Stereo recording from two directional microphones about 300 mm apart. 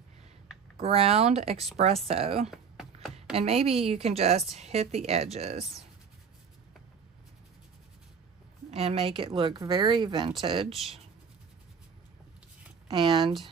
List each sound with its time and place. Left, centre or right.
0.7 s a woman's voice: centre
2.5 s a sound: centre
3.3 s a woman's voice: centre
8.6 s speech: centre
10.7 s speech: centre
12.8 s speech: centre